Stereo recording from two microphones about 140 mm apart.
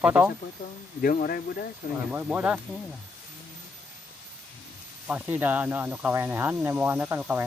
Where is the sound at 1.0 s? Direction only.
90° left.